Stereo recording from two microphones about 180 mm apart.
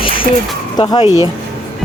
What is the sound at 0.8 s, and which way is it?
Speech, 25° left (ahead or behind).